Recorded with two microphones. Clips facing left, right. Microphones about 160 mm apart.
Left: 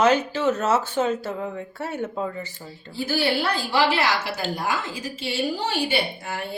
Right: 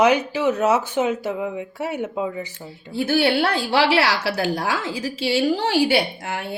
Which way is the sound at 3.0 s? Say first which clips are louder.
Right 5 dB; 65° right (ahead or behind).